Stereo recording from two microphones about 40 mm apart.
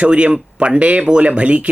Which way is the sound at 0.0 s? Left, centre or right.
Right.